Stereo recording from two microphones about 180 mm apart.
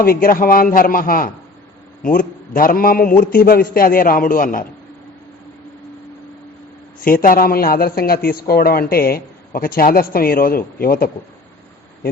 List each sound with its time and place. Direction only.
0.0 s a man's voice: 55° left (ahead or behind)
7.0 s a man's voice: 50° left (ahead or behind)